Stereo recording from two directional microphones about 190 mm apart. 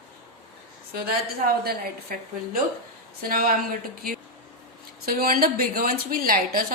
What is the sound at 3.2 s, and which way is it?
Speech, 50° right (ahead or behind).